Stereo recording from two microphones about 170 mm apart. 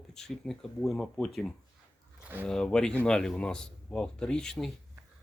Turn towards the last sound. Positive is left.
turn(degrees=5)  # may be behind; listen again after turning